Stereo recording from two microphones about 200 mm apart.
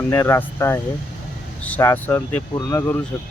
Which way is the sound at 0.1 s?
15° left (ahead or behind).